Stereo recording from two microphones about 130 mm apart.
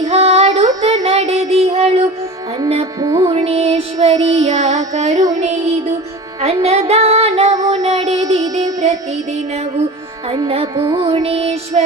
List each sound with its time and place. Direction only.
0.0 s child singing: 55° right (ahead or behind)
3.0 s music: 30° right (ahead or behind)
3.3 s music: 50° right (ahead or behind)
4.0 s child singing: 55° right (ahead or behind)
6.4 s music: 55° right (ahead or behind)
10.8 s music: 35° right (ahead or behind); by 11.8 s 50° right (ahead or behind)